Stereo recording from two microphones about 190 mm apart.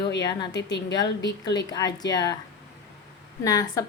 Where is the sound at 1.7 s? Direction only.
20° left (ahead or behind).